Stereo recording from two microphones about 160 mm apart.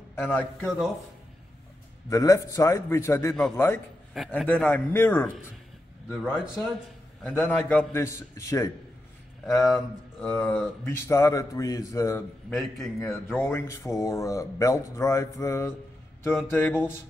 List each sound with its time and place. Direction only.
0.1 s speech: 10° left (ahead or behind)
2.0 s speech: 20° left (ahead or behind)
6.3 s a man's voice: 5° right (ahead or behind)
7.2 s speech: 10° left (ahead or behind)
9.5 s a man's voice: centre (ahead or behind); by 12.5 s 15° left (ahead or behind)
12.5 s a man's voice: centre (ahead or behind)
13.3 s speech: 15° left (ahead or behind)